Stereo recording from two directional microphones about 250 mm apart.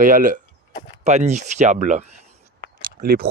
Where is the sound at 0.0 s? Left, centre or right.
Right.